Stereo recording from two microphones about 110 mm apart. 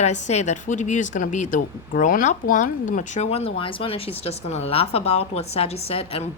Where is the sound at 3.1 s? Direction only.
85° left.